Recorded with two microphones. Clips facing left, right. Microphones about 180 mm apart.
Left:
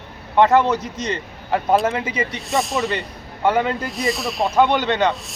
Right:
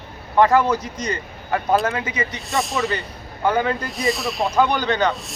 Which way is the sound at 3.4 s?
25° left (ahead or behind).